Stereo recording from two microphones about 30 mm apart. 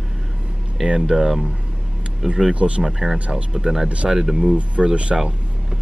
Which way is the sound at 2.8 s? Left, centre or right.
Centre.